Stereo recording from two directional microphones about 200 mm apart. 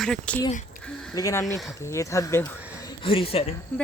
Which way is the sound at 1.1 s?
15° left (ahead or behind).